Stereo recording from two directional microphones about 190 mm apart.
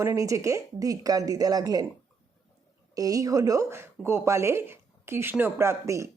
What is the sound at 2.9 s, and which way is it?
Speech, 20° right (ahead or behind).